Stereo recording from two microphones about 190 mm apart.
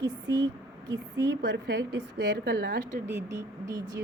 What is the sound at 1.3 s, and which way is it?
A woman's voice, 60° right (ahead or behind).